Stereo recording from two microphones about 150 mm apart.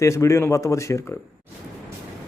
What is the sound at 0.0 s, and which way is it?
A man's voice, 20° left (ahead or behind).